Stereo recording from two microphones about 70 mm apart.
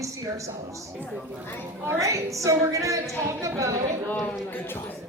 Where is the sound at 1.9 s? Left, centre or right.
Right.